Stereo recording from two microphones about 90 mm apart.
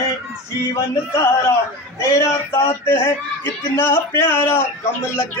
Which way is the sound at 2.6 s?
30° left (ahead or behind).